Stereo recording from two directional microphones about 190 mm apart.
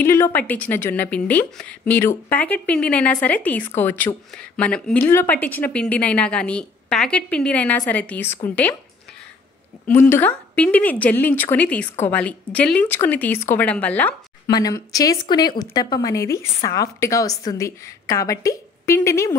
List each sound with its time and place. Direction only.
0.0 s speech: 15° left (ahead or behind)
9.8 s speech: 10° left (ahead or behind)
14.5 s a woman's voice: 20° left (ahead or behind)